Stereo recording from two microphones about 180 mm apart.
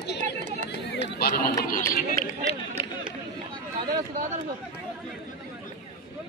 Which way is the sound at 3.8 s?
45° right (ahead or behind).